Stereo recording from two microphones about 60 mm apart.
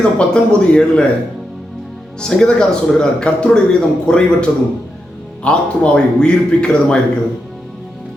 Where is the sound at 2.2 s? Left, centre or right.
Centre.